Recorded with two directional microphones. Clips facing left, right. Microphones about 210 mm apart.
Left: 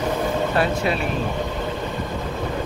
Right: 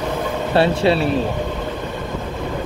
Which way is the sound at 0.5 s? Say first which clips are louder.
Right 10 dB; 30° right (ahead or behind).